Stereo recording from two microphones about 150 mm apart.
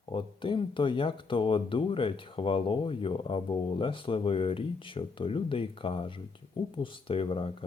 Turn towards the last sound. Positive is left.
turn(degrees=35)  # may be behind; listen again after turning